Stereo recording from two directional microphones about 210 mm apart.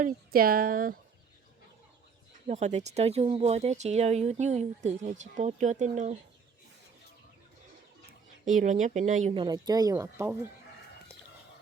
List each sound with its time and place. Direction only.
0.0 s speech: 45° right (ahead or behind)
2.5 s speech: 35° right (ahead or behind)
8.4 s speech: 35° right (ahead or behind)
9.3 s speech: 20° right (ahead or behind)